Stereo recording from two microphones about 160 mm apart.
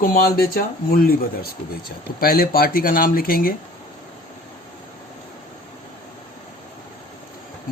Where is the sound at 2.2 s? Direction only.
70° left (ahead or behind).